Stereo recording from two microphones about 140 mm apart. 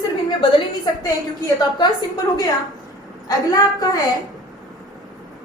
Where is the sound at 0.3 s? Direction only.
35° left (ahead or behind).